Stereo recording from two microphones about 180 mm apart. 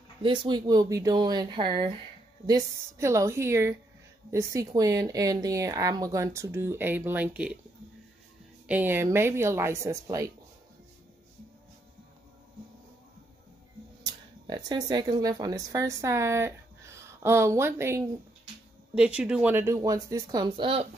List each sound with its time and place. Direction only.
0.2 s a woman's voice: 25° right (ahead or behind); by 7.5 s 5° right (ahead or behind)
8.6 s speech: 10° right (ahead or behind)
14.0 s a woman's voice: 20° right (ahead or behind)